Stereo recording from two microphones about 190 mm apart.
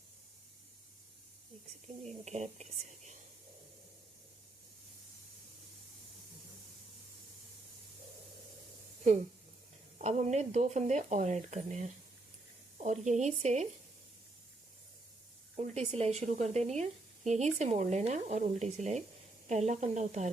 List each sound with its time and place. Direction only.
2.0 s speech: 35° right (ahead or behind)
10.0 s speech: 35° right (ahead or behind)
15.5 s speech: 35° right (ahead or behind)